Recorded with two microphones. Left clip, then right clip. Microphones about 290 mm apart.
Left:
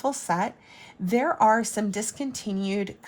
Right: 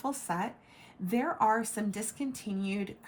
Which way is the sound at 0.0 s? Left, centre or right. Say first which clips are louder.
Left 8 dB; left.